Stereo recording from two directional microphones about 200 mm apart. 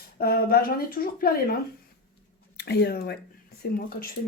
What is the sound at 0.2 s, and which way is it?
Speech, 50° left (ahead or behind).